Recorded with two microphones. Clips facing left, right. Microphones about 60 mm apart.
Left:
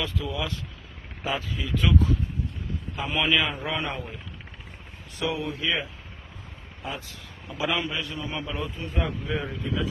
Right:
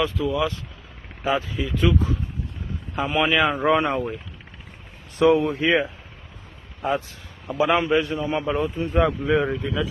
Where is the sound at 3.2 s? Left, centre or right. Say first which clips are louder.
Right 5 dB; right.